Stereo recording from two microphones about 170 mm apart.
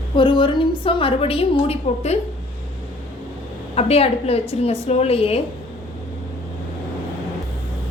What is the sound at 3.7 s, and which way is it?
A woman's voice, 35° left (ahead or behind).